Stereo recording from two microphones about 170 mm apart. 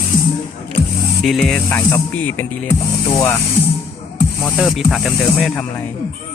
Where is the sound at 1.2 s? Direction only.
Centre (ahead or behind); by 3.4 s 15° left (ahead or behind).